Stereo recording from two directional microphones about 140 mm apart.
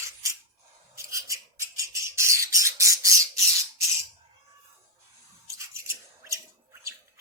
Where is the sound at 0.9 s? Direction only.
20° right (ahead or behind).